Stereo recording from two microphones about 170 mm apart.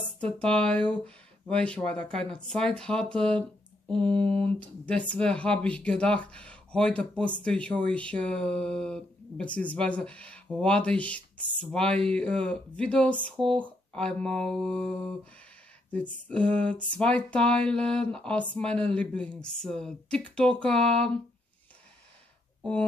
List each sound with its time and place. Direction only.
0.2 s speech: 5° left (ahead or behind)
4.6 s speech: 10° left (ahead or behind)
13.4 s speech: 30° right (ahead or behind)
13.9 s speech: 5° left (ahead or behind)
22.6 s speech: 5° left (ahead or behind)